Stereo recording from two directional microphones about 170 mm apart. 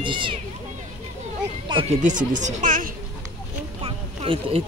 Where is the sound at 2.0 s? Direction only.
50° right (ahead or behind).